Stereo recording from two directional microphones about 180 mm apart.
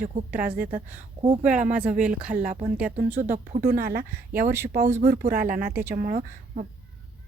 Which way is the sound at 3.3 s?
50° right (ahead or behind).